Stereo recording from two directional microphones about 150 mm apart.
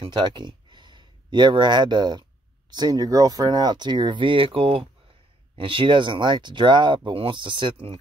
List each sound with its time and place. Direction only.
0.0 s speech: 30° right (ahead or behind)